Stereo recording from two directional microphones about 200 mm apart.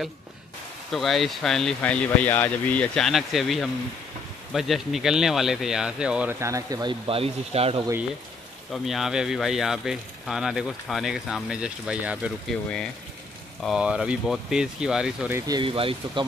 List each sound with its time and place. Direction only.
0.9 s speech: centre (ahead or behind); by 7.8 s 30° right (ahead or behind)
8.7 s speech: centre (ahead or behind); by 16.3 s 25° right (ahead or behind)